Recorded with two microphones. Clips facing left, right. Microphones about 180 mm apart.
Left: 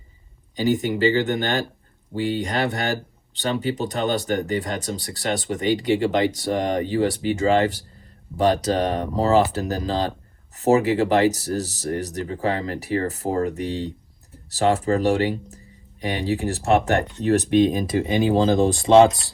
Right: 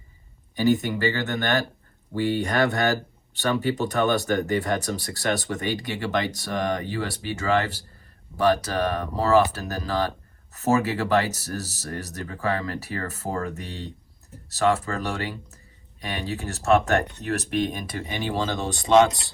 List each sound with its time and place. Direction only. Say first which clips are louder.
0.5 s speech: even; 15° left (ahead or behind)